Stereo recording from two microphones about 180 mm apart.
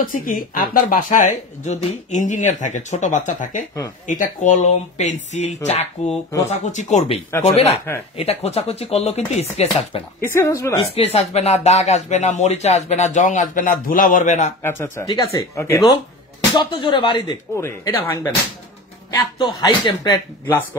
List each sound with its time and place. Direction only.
0.0 s speech: 50° left (ahead or behind)
10.2 s speech: 15° left (ahead or behind)
11.1 s speech: 35° left (ahead or behind)
14.6 s speech: 15° left (ahead or behind)
16.5 s speech: 25° left (ahead or behind)
17.6 s speech: 15° left (ahead or behind)